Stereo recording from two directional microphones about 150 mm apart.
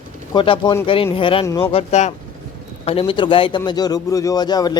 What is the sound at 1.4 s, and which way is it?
Speech, 20° left (ahead or behind).